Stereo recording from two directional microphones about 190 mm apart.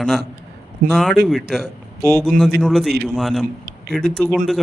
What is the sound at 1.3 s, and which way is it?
Speech, centre (ahead or behind).